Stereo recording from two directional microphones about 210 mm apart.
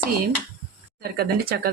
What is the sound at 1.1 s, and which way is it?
Speech, 45° right (ahead or behind).